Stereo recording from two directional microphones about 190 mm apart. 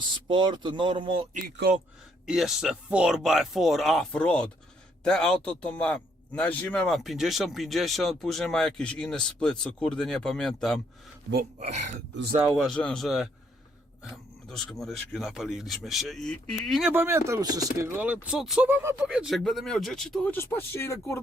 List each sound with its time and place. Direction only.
0.3 s speech: 25° right (ahead or behind)
1.3 s speech: 45° right (ahead or behind)
2.2 s speech: centre (ahead or behind)
11.6 s speech: 35° right (ahead or behind)
12.5 s speech: 5° left (ahead or behind)
16.9 s speech: 10° right (ahead or behind); by 21.2 s 15° left (ahead or behind)